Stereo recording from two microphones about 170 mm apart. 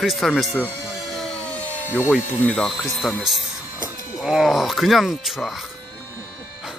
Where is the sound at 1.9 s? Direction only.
15° left (ahead or behind).